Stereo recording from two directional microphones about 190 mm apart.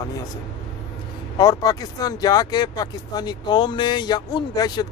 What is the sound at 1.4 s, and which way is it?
Speech, 20° left (ahead or behind).